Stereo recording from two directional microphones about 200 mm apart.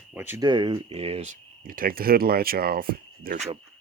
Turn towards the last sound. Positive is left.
turn(degrees=-45)  # may be behind; listen again after turning